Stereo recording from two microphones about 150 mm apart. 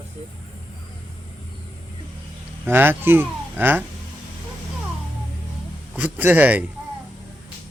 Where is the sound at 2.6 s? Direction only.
15° right (ahead or behind).